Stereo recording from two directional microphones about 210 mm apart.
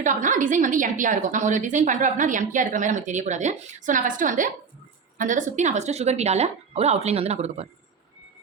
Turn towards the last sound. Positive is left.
turn(degrees=-30)  # may be behind; listen again after turning